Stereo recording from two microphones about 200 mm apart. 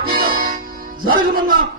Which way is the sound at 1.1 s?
45° right (ahead or behind).